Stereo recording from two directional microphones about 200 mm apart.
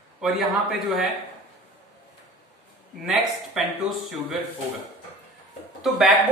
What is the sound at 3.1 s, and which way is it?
Speech, centre (ahead or behind).